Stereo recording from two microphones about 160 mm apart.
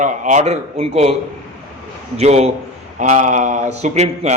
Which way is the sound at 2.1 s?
40° right (ahead or behind).